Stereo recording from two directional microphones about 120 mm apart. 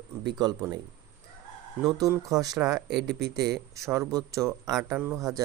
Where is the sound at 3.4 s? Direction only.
25° right (ahead or behind).